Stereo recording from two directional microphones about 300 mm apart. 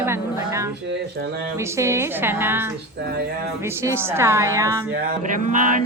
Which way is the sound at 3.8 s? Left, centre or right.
Centre.